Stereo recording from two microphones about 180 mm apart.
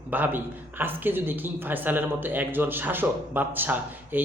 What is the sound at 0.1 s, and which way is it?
A man's voice, 10° right (ahead or behind).